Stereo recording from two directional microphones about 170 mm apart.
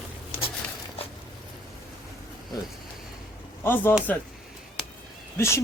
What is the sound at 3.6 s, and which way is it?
Speech, 10° left (ahead or behind).